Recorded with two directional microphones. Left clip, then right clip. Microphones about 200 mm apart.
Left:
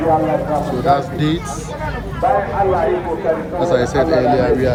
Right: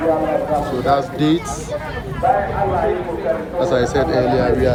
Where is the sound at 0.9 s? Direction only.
15° right (ahead or behind).